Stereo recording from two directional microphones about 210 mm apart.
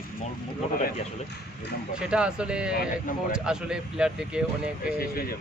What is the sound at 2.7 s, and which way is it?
Speech, 45° left (ahead or behind).